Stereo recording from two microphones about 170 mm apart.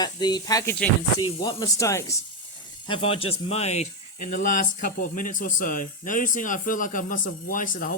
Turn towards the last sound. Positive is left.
turn(degrees=55)  # may be behind; listen again after turning